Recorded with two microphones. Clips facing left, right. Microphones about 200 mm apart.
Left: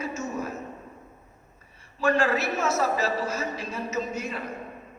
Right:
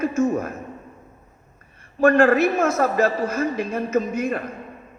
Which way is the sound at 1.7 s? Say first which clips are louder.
Right 8 dB; 55° right (ahead or behind).